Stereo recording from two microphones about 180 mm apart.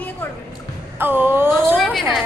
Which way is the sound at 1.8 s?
Centre (ahead or behind).